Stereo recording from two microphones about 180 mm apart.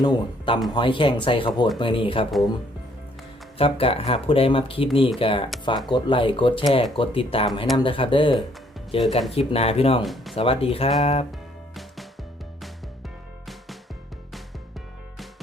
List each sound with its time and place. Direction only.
0.0 s speech: 25° left (ahead or behind)
3.6 s speech: 30° left (ahead or behind)
10.0 s speech: centre (ahead or behind)
10.3 s speech: 30° left (ahead or behind)
11.3 s music: centre (ahead or behind)